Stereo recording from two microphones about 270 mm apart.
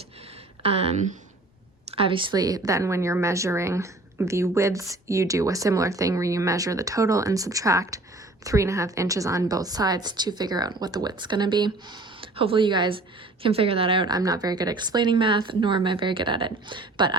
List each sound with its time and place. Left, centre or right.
0.6 s a woman's voice: right